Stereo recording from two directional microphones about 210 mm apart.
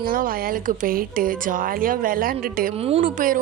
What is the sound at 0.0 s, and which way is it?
A woman's voice, 45° right (ahead or behind).